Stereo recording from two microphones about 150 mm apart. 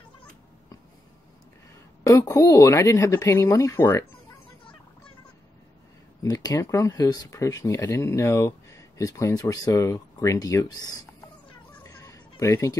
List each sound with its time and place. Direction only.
2.0 s speech: 20° left (ahead or behind)
6.2 s speech: 25° left (ahead or behind)
11.8 s a sound: 20° left (ahead or behind)